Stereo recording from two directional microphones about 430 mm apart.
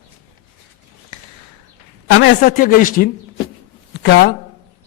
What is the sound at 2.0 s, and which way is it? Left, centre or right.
A man's voice, left.